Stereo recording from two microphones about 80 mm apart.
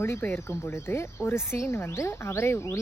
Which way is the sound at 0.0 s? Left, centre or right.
Left.